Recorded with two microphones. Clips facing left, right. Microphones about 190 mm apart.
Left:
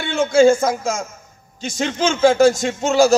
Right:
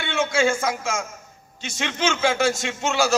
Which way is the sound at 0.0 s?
35° left (ahead or behind).